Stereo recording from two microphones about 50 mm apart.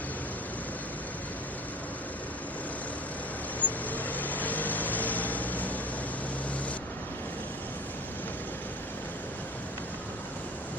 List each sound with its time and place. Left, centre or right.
3.6 s vehicle: left